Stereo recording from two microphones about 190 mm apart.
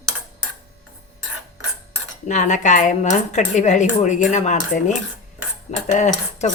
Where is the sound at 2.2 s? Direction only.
40° left (ahead or behind).